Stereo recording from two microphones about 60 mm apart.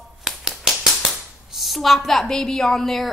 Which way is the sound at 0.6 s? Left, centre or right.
Centre.